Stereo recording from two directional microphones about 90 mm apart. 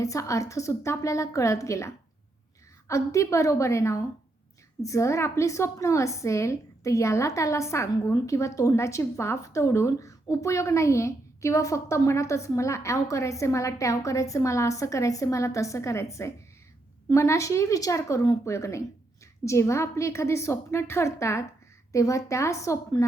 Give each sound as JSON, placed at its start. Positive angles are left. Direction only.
{"t": 0.0, "sound": "a woman's voice", "side_deg": 35}